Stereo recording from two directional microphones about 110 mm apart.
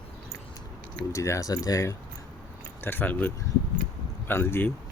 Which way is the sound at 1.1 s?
30° left (ahead or behind).